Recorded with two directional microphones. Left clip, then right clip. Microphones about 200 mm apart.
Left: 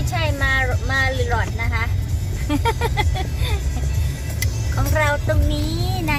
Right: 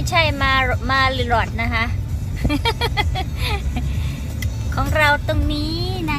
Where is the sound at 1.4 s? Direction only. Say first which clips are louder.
Right 4 dB; 15° right (ahead or behind).